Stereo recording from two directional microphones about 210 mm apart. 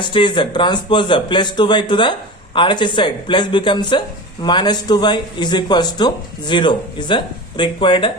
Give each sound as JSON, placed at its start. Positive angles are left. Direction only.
{"t": 0.1, "sound": "speech", "side_deg": 25}